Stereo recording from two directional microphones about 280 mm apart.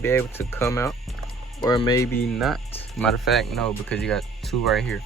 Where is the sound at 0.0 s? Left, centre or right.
Centre.